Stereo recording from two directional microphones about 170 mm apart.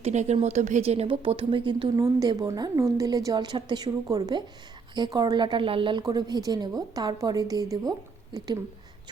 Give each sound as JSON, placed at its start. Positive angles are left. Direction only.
{"t": 0.0, "sound": "speech", "side_deg": -40}